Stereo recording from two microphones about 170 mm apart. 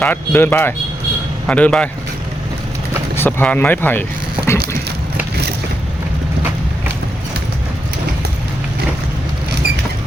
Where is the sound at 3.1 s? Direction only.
10° left (ahead or behind).